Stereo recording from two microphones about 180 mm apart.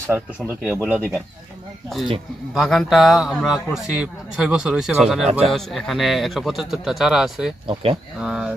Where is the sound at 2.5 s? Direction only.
Centre (ahead or behind).